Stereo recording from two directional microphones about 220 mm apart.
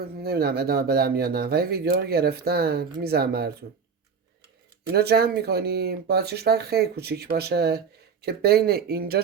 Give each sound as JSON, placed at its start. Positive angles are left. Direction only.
{"t": 0.0, "sound": "speech", "side_deg": -45}
{"t": 4.9, "sound": "speech", "side_deg": -45}